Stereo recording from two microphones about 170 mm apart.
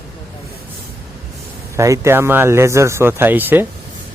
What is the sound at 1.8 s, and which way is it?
Speech, 15° right (ahead or behind).